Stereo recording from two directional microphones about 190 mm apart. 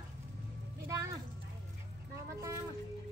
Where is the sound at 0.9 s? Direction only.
15° right (ahead or behind).